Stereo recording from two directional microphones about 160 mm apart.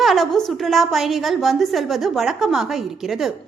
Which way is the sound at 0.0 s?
Centre (ahead or behind).